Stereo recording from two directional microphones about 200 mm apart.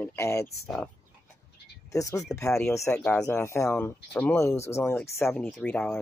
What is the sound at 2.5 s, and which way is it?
Speech, 5° left (ahead or behind).